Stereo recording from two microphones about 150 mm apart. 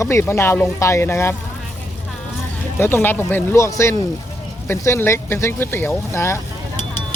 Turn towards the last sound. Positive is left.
turn(degrees=20)  # may be behind; listen again after turning